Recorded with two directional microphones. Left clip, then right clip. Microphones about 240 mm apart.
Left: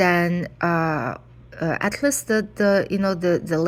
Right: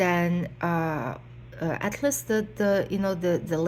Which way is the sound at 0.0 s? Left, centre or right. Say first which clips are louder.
Left 5 dB; left.